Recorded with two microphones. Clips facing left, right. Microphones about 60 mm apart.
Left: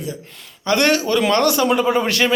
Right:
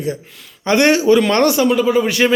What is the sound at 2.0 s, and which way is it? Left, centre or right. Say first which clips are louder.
Speech: right 3 dB; centre.